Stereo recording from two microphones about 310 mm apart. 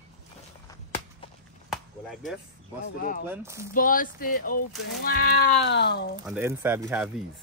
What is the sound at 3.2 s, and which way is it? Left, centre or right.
Speech, centre.